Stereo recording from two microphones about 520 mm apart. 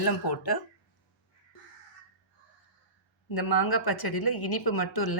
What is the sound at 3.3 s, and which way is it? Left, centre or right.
Speech, left.